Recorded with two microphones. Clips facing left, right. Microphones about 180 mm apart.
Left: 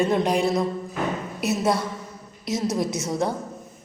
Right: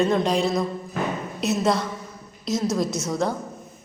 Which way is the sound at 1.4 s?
10° left (ahead or behind).